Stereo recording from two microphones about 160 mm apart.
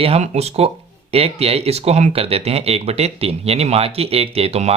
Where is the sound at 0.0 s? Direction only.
40° right (ahead or behind).